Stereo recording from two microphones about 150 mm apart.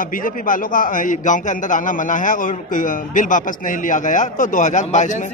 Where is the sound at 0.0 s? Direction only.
65° left (ahead or behind).